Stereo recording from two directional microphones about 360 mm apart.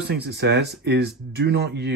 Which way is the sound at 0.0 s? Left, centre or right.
Right.